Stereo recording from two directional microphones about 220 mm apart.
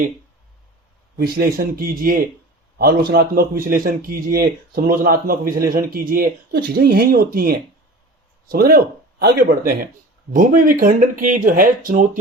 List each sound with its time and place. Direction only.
1.2 s speech: 40° right (ahead or behind)